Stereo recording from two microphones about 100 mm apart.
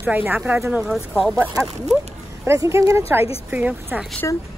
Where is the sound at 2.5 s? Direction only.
30° right (ahead or behind).